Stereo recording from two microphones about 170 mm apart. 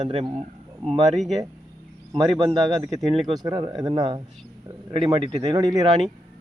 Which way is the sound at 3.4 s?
25° right (ahead or behind).